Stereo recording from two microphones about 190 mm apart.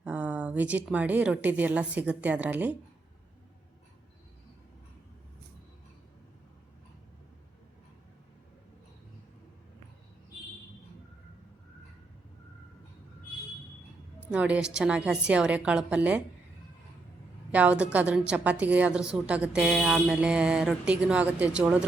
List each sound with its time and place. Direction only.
0.0 s a woman's voice: 5° right (ahead or behind)
14.2 s a woman's voice: 5° right (ahead or behind)
17.5 s a woman's voice: 5° right (ahead or behind)